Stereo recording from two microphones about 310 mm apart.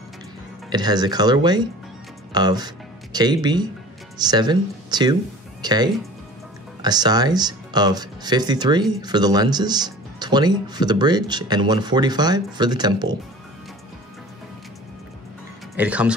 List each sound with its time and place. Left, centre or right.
0.7 s speech: centre
15.7 s speech: centre